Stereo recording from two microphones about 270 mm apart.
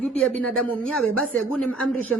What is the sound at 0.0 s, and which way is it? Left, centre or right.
Speech, centre.